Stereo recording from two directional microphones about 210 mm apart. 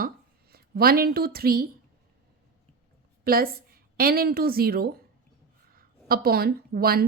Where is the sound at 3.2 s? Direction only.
45° right (ahead or behind).